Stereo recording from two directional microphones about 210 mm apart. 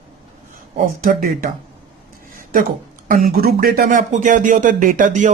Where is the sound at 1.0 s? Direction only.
40° right (ahead or behind).